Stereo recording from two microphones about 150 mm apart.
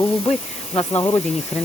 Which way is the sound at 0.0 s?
40° left (ahead or behind).